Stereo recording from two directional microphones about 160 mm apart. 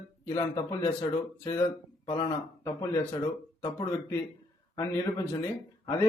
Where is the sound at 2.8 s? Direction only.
20° left (ahead or behind).